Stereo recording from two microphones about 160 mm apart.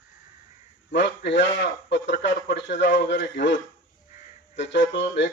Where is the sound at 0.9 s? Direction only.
90° left.